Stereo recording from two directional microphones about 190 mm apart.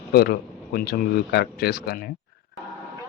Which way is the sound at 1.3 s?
55° left (ahead or behind).